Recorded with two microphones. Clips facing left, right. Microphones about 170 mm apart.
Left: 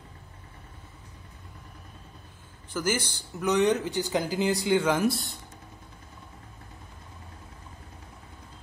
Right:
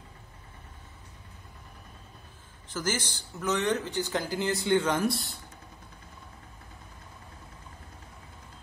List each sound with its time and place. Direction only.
2.7 s speech: 10° left (ahead or behind)